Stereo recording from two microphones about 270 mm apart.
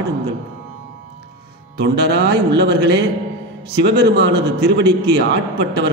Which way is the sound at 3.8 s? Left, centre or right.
Right.